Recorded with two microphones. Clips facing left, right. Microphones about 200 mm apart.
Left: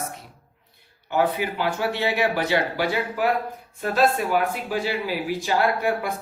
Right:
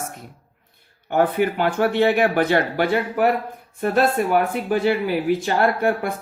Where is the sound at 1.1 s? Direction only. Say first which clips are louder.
Right 4 dB; 55° right (ahead or behind).